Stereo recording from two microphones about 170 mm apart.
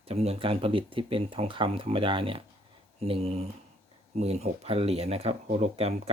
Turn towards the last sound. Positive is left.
turn(degrees=-40)  # may be behind; listen again after turning